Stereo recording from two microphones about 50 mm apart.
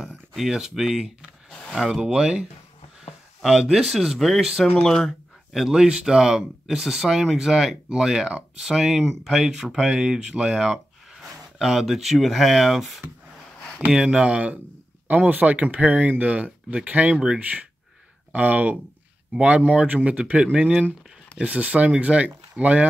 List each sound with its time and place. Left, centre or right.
0.4 s speech: centre
3.7 s speech: centre
4.7 s speech: centre
5.5 s speech: centre
13.8 s speech: centre
21.5 s speech: right